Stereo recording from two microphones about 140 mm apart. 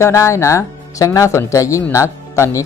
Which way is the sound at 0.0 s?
20° left (ahead or behind).